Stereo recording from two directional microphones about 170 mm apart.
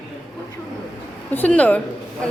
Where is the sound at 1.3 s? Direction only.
10° left (ahead or behind).